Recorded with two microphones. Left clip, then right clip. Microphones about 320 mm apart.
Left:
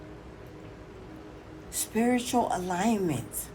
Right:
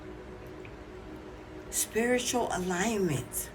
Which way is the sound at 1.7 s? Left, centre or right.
Centre.